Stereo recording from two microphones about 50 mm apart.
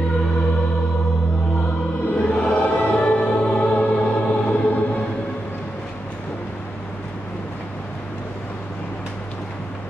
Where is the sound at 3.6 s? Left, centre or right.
Left.